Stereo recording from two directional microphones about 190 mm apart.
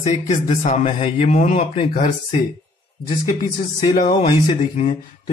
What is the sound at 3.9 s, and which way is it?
Speech, 30° left (ahead or behind).